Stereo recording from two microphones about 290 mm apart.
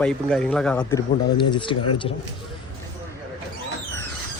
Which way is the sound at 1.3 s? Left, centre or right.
Centre.